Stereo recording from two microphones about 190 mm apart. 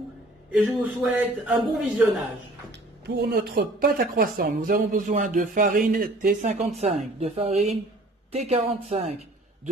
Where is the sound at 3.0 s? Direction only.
60° right (ahead or behind).